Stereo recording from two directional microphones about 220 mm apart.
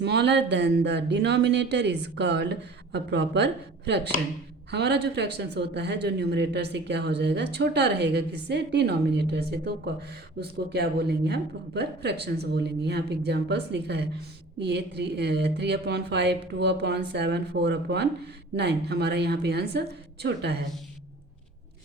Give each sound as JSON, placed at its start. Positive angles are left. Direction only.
{"t": 0.0, "sound": "speech", "side_deg": -50}